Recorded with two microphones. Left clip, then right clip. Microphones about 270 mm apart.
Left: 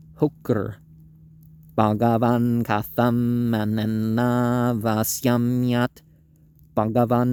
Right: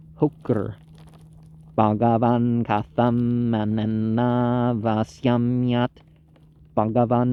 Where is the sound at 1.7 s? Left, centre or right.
Left.